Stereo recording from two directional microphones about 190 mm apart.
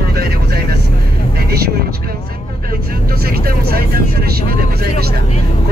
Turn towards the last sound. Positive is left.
turn(degrees=-55)  # may be behind; listen again after turning